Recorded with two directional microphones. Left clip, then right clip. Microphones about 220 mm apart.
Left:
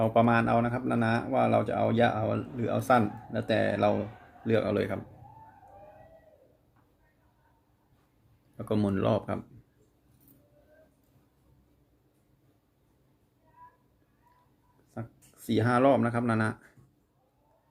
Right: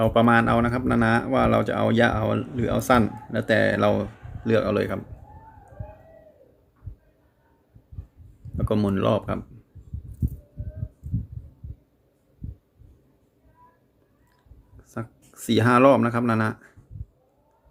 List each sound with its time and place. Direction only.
0.0 s speech: 15° right (ahead or behind)
8.5 s speech: 10° right (ahead or behind)
15.4 s speech: 20° right (ahead or behind)